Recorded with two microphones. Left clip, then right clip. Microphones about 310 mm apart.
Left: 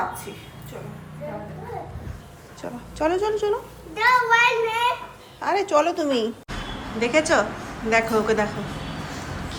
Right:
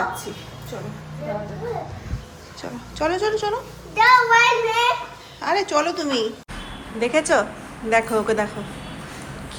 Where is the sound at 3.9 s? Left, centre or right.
Centre.